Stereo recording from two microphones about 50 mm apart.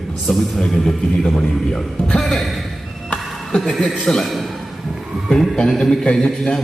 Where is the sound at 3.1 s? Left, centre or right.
Centre.